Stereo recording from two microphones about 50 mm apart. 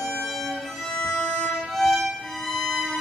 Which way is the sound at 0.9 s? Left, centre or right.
Centre.